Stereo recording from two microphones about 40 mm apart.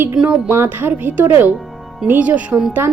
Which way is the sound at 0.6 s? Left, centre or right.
Right.